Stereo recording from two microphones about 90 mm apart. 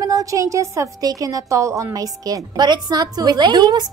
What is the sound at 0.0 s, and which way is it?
A woman's voice, 40° right (ahead or behind).